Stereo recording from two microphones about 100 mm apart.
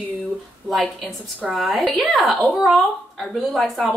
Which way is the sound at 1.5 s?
Centre (ahead or behind).